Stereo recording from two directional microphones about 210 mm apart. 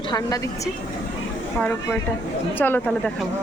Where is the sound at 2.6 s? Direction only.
10° left (ahead or behind).